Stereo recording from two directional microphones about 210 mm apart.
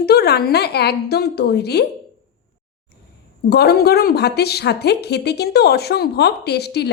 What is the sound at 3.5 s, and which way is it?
A woman's voice, 50° left (ahead or behind).